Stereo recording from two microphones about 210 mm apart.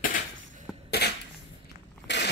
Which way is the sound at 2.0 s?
55° left (ahead or behind).